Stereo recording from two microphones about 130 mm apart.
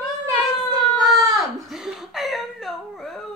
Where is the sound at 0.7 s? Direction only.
30° right (ahead or behind).